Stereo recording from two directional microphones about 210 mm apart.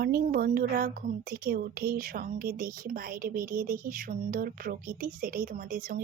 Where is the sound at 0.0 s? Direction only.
45° right (ahead or behind).